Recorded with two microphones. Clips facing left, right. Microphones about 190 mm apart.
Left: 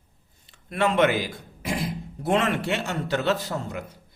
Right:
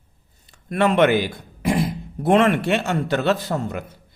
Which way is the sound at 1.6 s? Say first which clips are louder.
Right 7 dB; 55° right (ahead or behind).